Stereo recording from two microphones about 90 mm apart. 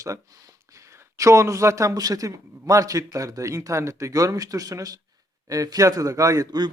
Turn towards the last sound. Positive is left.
turn(degrees=-45)  # may be behind; listen again after turning